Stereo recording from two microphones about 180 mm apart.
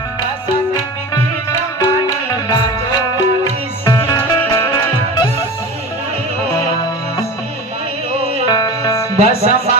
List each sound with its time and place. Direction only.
1.8 s music: 20° left (ahead or behind)
8.2 s music: 35° right (ahead or behind)
8.4 s music: 20° left (ahead or behind)
9.1 s music: 35° right (ahead or behind)